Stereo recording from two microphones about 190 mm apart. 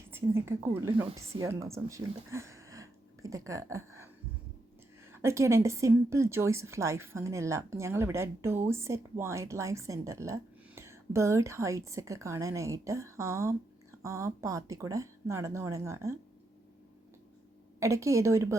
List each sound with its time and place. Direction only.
0.1 s a woman's voice: 15° right (ahead or behind)
5.1 s a woman's voice: 15° right (ahead or behind)
17.7 s a woman's voice: 15° right (ahead or behind)